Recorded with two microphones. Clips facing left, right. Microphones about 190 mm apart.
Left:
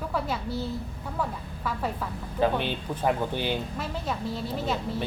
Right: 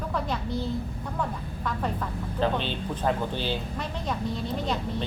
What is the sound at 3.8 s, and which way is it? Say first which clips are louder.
Speech: even; 5° left (ahead or behind).